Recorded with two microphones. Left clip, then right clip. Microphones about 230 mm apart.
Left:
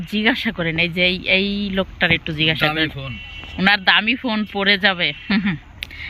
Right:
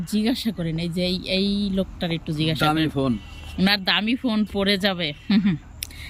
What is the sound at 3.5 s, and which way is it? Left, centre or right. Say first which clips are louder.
Speech: left 6 dB; centre.